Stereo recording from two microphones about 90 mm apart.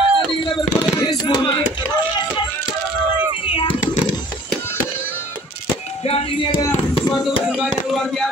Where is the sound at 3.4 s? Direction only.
90° left.